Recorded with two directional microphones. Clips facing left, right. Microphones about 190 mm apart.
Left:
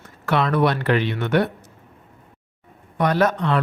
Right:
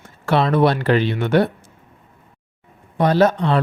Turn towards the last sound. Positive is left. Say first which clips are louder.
# right 4 dB
turn(degrees=-30)  # may be behind; listen again after turning